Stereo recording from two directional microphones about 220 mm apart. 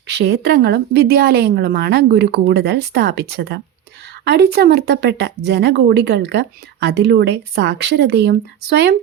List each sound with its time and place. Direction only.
0.2 s speech: 50° right (ahead or behind)